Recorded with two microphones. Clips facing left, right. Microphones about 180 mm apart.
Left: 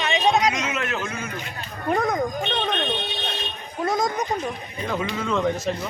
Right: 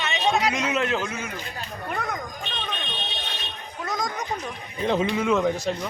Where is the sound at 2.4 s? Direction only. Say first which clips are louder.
Left 8 dB; 60° left (ahead or behind).